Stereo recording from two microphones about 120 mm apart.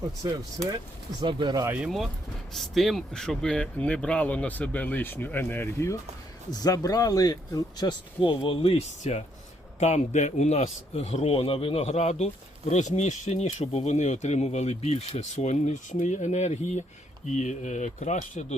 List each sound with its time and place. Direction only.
1.2 s speech: 40° right (ahead or behind)
2.5 s speech: centre (ahead or behind); by 5.9 s 15° left (ahead or behind)
6.5 s speech: 30° left (ahead or behind); by 16.8 s 70° left (ahead or behind)
17.2 s speech: 90° left